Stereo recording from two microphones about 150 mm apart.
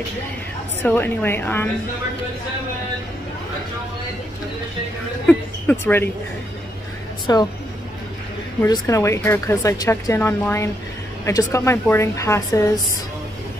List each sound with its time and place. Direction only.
0.8 s a woman's voice: 15° left (ahead or behind)
5.2 s a sound: 15° left (ahead or behind)
7.3 s speech: 25° left (ahead or behind)
8.6 s speech: 25° left (ahead or behind)